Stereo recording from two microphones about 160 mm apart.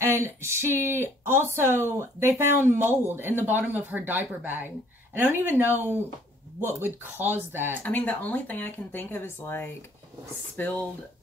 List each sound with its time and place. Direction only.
0.0 s speech: 15° right (ahead or behind)
7.8 s speech: 10° left (ahead or behind)